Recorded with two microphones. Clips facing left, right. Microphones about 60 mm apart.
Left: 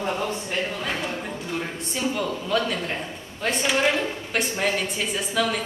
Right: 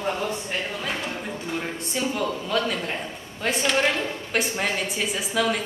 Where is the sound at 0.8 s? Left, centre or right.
Centre.